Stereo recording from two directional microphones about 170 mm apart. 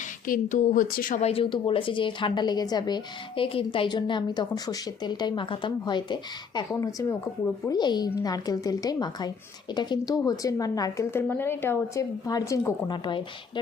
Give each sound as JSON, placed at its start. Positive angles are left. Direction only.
{"t": 0.3, "sound": "a woman's voice", "side_deg": 50}
{"t": 1.2, "sound": "a woman's voice", "side_deg": 35}